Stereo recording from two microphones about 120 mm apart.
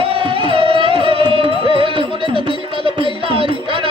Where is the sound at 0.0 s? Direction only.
50° right (ahead or behind).